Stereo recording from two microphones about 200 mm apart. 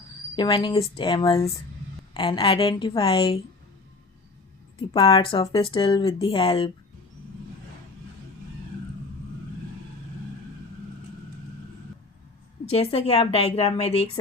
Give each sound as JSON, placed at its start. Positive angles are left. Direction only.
{"t": 0.3, "sound": "speech", "side_deg": 20}
{"t": 4.8, "sound": "speech", "side_deg": 25}
{"t": 12.7, "sound": "a woman's voice", "side_deg": 30}